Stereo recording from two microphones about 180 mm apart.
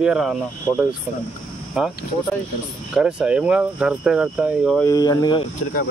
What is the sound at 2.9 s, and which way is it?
Speech, 5° right (ahead or behind).